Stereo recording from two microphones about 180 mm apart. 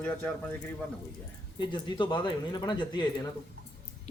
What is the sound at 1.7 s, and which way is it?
Speech, 25° left (ahead or behind).